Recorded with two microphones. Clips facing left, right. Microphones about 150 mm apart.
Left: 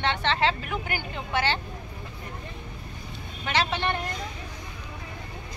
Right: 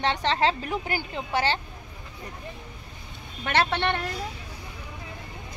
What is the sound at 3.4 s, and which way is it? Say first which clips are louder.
Speech: right 2 dB; 55° right (ahead or behind).